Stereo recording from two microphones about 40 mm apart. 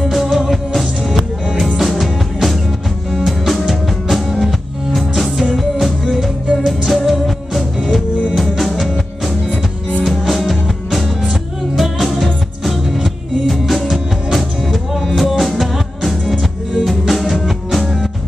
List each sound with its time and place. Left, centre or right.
0.0 s music: centre